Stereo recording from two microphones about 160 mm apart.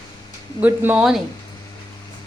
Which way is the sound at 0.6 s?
10° right (ahead or behind).